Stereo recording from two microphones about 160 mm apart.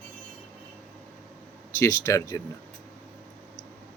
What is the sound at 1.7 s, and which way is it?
Speech, 20° left (ahead or behind).